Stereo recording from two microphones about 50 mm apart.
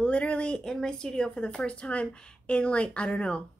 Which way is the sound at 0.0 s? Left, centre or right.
Left.